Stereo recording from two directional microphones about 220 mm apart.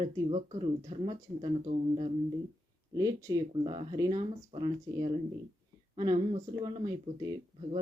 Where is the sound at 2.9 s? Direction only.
15° right (ahead or behind).